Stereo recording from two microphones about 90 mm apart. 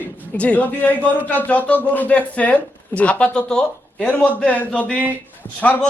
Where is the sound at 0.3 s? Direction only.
15° left (ahead or behind).